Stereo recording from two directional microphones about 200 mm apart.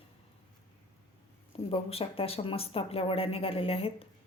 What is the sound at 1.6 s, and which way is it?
Speech, 30° left (ahead or behind).